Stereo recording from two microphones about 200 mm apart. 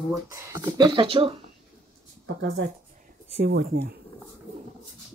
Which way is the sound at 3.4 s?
60° right (ahead or behind).